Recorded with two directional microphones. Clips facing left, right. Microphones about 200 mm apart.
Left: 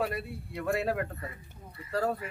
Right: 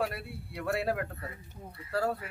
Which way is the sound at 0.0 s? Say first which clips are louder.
Left 2 dB; centre (ahead or behind).